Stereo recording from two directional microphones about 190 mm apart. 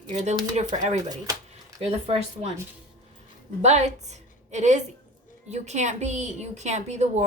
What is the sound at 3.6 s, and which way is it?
A woman's voice, 35° right (ahead or behind).